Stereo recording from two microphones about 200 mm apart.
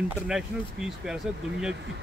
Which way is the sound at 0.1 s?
5° right (ahead or behind).